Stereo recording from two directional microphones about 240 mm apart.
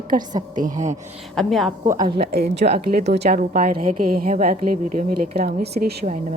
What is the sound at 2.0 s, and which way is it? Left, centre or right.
A woman's voice, right.